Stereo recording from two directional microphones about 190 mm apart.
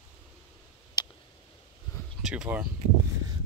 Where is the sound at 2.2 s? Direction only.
5° right (ahead or behind).